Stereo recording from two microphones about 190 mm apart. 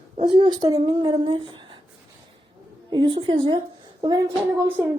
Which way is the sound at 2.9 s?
25° right (ahead or behind).